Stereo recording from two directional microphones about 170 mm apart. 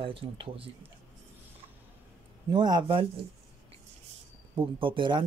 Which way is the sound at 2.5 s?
25° right (ahead or behind).